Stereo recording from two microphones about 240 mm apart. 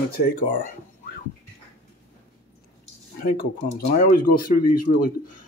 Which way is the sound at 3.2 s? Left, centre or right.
Left.